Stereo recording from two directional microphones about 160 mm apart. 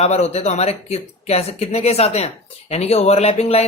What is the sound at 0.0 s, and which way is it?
Speech, 40° left (ahead or behind).